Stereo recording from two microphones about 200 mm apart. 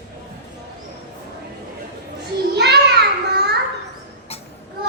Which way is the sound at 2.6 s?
55° right (ahead or behind).